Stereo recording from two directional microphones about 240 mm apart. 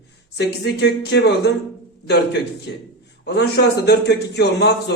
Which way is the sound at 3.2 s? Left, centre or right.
Left.